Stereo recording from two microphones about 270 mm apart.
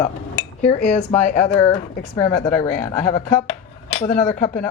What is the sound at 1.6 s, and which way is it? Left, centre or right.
Speech, left.